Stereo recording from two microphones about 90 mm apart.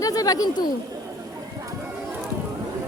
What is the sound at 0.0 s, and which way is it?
Speech, 40° left (ahead or behind).